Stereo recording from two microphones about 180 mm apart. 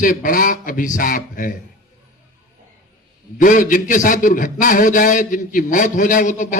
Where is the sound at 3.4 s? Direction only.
45° left (ahead or behind).